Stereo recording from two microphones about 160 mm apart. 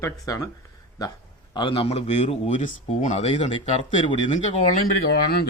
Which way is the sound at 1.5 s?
30° left (ahead or behind).